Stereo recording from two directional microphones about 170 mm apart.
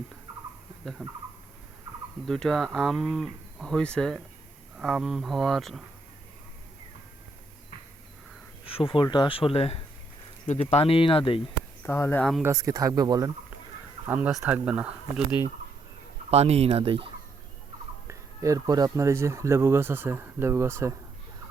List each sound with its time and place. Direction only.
1.0 s speech: centre (ahead or behind)
2.2 s speech: 5° left (ahead or behind)
8.6 s speech: 30° left (ahead or behind)
11.8 s speech: 15° left (ahead or behind)
12.4 s speech: 20° right (ahead or behind)
14.1 s speech: 5° right (ahead or behind)
16.3 s fowl: 40° right (ahead or behind)
18.1 s speech: 20° right (ahead or behind)